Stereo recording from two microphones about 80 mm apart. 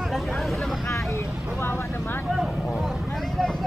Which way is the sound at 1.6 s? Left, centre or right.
Left.